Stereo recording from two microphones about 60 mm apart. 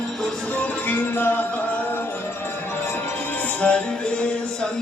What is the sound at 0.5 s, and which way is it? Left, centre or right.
Music, left.